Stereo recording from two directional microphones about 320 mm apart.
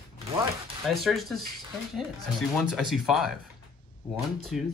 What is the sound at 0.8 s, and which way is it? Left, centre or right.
Speech, centre.